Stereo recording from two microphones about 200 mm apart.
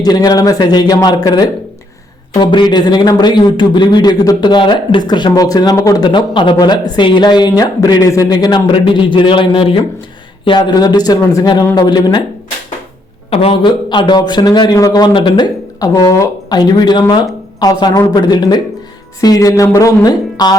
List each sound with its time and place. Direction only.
0.0 s a man's voice: 20° left (ahead or behind)
13.3 s a man's voice: 25° left (ahead or behind)